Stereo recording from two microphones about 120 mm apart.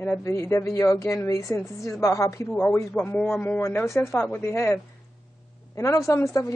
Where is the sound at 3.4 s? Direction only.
20° left (ahead or behind).